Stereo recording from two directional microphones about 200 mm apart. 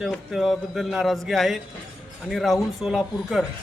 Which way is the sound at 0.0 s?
Centre (ahead or behind).